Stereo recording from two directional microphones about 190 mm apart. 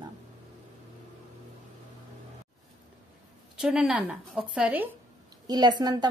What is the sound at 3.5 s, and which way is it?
A woman's voice, 5° right (ahead or behind).